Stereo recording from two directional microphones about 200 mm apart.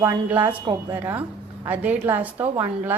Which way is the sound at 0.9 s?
10° right (ahead or behind).